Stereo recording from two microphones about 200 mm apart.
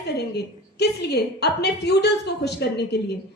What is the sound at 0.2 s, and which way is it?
A woman's voice, 55° left (ahead or behind).